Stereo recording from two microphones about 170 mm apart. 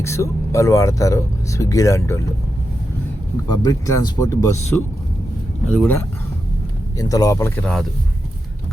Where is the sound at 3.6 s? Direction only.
20° left (ahead or behind).